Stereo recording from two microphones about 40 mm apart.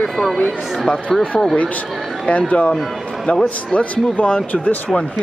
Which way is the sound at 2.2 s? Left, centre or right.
Left.